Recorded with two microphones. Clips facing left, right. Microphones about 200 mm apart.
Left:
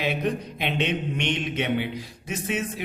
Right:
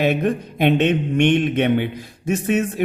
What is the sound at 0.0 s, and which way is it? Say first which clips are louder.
Speech: right 7 dB; 50° right (ahead or behind).